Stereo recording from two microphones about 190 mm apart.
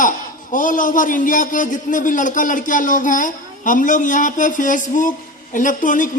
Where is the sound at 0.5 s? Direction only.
45° left (ahead or behind).